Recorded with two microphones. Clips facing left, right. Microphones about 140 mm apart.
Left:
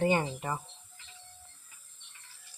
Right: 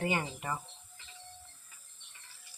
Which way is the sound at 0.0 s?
35° left (ahead or behind).